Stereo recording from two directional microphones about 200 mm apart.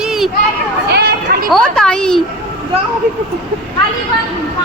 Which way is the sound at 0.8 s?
55° right (ahead or behind).